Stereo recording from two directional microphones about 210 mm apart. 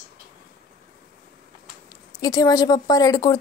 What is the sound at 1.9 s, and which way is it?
Speech, 15° left (ahead or behind).